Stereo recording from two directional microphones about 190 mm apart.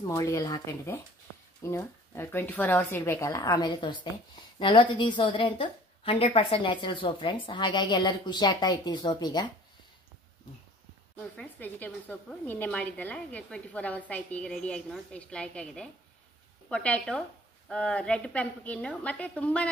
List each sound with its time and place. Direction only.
0.0 s a woman's voice: 15° left (ahead or behind)
11.3 s a woman's voice: 10° left (ahead or behind)